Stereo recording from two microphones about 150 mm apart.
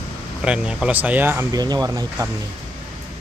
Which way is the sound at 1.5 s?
25° right (ahead or behind).